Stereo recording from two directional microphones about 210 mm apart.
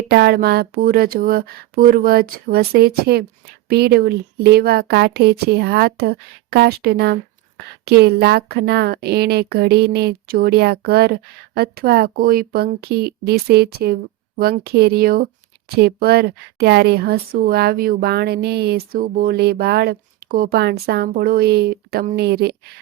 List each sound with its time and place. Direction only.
0.1 s speech: 50° right (ahead or behind)